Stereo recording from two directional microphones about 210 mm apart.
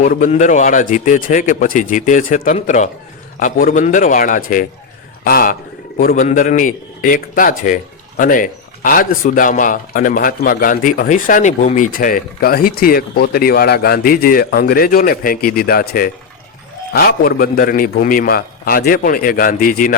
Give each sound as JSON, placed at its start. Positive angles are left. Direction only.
{"t": 0.0, "sound": "a man's voice", "side_deg": 40}